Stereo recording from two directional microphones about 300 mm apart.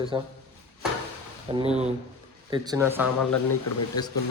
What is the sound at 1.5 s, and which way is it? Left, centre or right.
Speech, right.